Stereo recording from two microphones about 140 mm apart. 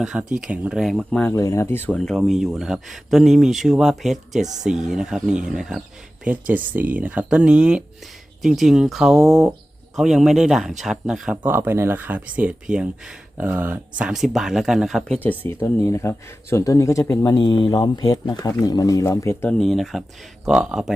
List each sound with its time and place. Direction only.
0.0 s speech: 5° right (ahead or behind)
1.3 s speech: 20° left (ahead or behind)
2.1 s speech: centre (ahead or behind); by 19.5 s 20° left (ahead or behind)
19.5 s speech: centre (ahead or behind)